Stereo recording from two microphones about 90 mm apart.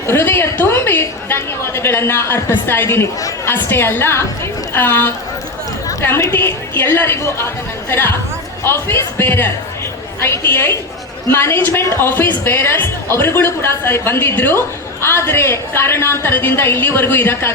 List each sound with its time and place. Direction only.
0.1 s speech: 25° left (ahead or behind)
3.2 s chatter: 40° left (ahead or behind)
3.5 s speech: 25° left (ahead or behind)
6.3 s speech: 25° left (ahead or behind)